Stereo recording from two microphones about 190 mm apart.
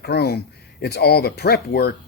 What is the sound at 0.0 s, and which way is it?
A man's voice, 60° left (ahead or behind).